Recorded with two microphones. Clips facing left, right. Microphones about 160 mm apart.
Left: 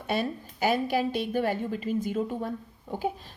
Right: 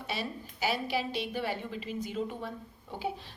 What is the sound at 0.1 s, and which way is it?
A woman's voice, 50° left (ahead or behind).